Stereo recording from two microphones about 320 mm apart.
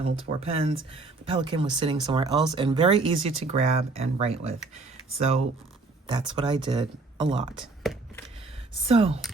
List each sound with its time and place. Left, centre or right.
0.0 s speech: centre
6.1 s speech: centre
7.6 s computer keyboard: centre
8.9 s speech: centre